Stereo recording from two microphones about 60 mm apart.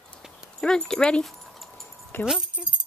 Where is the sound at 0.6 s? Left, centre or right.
Centre.